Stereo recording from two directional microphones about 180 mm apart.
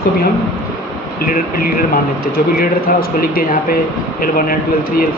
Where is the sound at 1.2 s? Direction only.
50° left (ahead or behind).